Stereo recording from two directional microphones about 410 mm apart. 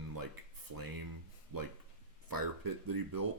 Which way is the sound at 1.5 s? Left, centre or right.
Right.